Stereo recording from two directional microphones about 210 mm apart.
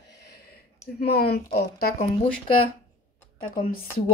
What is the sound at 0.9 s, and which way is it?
A woman's voice, 50° left (ahead or behind).